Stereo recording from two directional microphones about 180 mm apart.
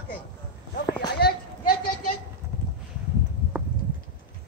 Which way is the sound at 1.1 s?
60° left (ahead or behind).